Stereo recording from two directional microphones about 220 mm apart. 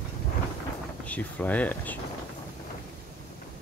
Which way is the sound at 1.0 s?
5° left (ahead or behind).